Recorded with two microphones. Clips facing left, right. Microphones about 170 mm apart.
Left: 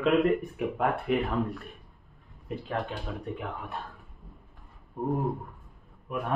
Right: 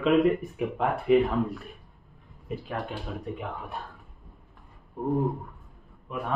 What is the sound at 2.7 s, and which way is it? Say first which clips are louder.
Speech: left 2 dB; centre (ahead or behind).